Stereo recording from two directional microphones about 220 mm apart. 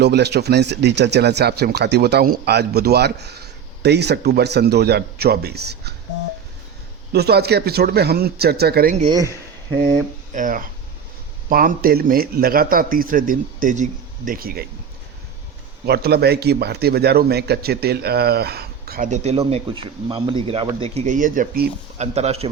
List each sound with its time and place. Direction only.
0.0 s speech: 50° right (ahead or behind)
7.1 s speech: 45° right (ahead or behind)
9.0 s speech: 20° right (ahead or behind)
10.3 s a man's voice: 40° right (ahead or behind)
15.9 s speech: 45° right (ahead or behind); by 22.4 s 30° right (ahead or behind)